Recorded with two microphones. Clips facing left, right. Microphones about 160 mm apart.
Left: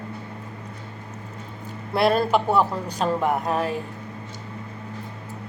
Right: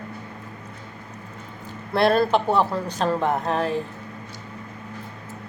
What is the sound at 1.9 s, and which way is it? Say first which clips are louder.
Speech: right 1 dB; 10° left (ahead or behind).